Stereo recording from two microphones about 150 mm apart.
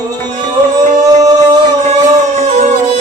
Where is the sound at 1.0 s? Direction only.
25° right (ahead or behind).